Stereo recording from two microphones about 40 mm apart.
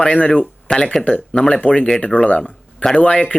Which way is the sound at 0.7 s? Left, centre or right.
Left.